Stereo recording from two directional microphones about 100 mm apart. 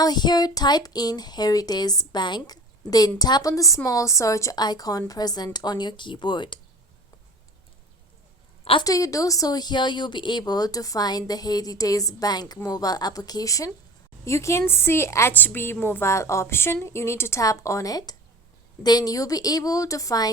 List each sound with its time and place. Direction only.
0.0 s speech: 45° left (ahead or behind)
8.8 s a woman's voice: 35° left (ahead or behind)